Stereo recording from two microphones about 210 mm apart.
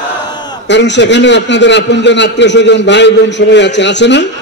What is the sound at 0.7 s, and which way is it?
A man's voice, 55° left (ahead or behind).